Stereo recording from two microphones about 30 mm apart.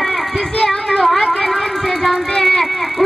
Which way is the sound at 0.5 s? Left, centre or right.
Left.